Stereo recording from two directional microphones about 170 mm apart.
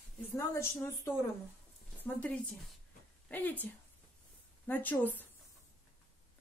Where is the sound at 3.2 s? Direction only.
10° left (ahead or behind).